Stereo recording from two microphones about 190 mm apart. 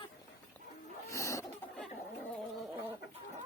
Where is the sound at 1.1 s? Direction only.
15° left (ahead or behind).